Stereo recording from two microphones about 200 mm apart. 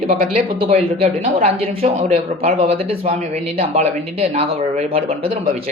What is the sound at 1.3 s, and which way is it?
Speech, 30° right (ahead or behind).